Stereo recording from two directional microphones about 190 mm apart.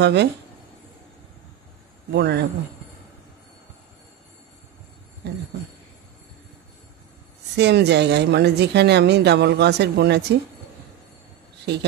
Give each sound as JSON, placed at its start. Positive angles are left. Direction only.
{"t": 0.0, "sound": "a woman's voice", "side_deg": -65}
{"t": 2.1, "sound": "a woman's voice", "side_deg": -60}
{"t": 7.5, "sound": "a woman's voice", "side_deg": -60}